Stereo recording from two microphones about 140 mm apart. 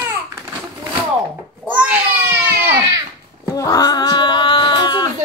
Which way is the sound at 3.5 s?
25° left (ahead or behind).